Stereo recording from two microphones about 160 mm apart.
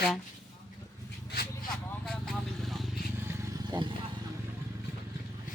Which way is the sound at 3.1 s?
15° right (ahead or behind).